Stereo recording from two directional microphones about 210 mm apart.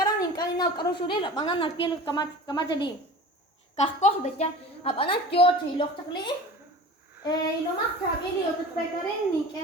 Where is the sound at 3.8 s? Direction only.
30° left (ahead or behind).